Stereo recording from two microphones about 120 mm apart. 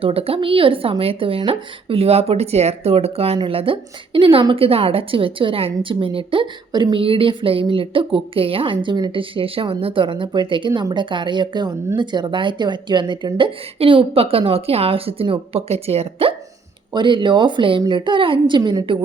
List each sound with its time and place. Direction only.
0.0 s a woman's voice: 50° right (ahead or behind)
16.9 s a woman's voice: 40° right (ahead or behind)